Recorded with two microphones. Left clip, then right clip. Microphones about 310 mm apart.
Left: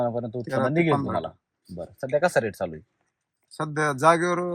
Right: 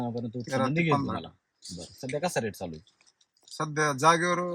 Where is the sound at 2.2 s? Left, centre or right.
Centre.